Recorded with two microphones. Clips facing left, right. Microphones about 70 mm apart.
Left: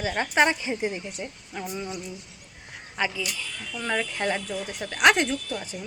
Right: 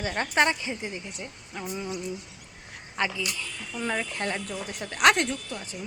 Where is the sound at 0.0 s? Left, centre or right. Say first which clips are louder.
Left 2 dB; centre.